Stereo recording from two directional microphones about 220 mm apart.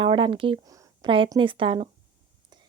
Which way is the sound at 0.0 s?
25° right (ahead or behind).